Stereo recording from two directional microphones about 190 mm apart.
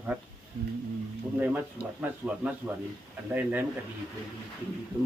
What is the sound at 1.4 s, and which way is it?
Speech, 10° right (ahead or behind).